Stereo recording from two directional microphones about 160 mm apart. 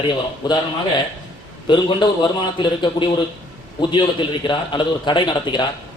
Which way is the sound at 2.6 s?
30° left (ahead or behind).